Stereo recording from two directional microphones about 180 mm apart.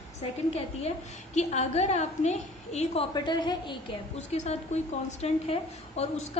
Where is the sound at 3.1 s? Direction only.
25° left (ahead or behind).